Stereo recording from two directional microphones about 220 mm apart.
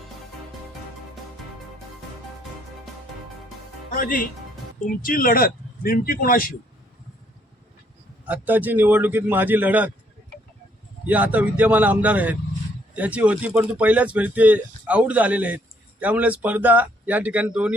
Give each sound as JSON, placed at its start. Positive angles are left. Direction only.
{"t": 3.9, "sound": "speech", "side_deg": 40}
{"t": 8.3, "sound": "speech", "side_deg": -10}
{"t": 11.0, "sound": "speech", "side_deg": -5}